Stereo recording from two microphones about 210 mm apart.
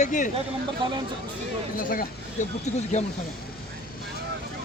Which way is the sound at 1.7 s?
40° left (ahead or behind).